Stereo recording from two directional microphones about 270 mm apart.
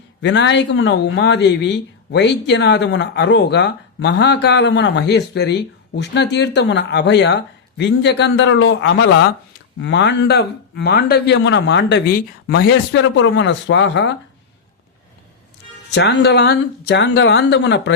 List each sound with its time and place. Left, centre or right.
0.2 s speech: left
16.0 s speech: left